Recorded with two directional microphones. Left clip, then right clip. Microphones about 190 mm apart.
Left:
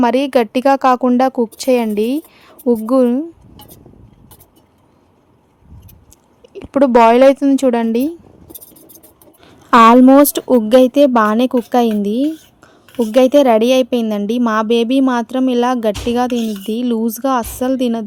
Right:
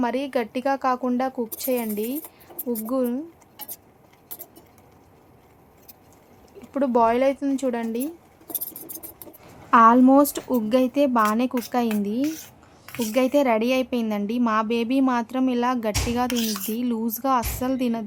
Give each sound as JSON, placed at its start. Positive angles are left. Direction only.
{"t": 0.0, "sound": "a woman's voice", "side_deg": 55}
{"t": 6.7, "sound": "a woman's voice", "side_deg": 55}
{"t": 9.6, "sound": "a woman's voice", "side_deg": 40}
{"t": 16.3, "sound": "speech", "side_deg": -20}
{"t": 16.6, "sound": "a woman's voice", "side_deg": 35}